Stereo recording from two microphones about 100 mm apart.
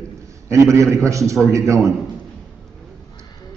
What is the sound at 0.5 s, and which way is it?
A man's voice, 30° right (ahead or behind).